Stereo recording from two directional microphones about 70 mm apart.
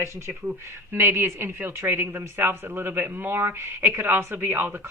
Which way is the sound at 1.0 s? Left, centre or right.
Right.